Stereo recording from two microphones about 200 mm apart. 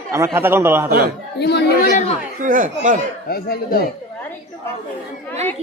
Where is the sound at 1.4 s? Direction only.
55° left (ahead or behind).